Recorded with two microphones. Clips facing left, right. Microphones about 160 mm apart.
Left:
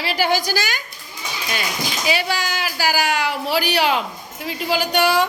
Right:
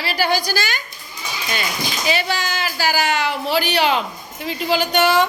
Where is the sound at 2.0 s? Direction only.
5° left (ahead or behind).